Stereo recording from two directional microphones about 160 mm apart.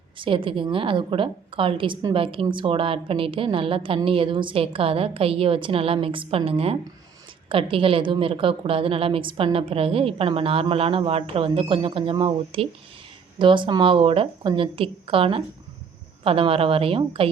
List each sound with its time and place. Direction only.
0.2 s a woman's voice: 30° right (ahead or behind)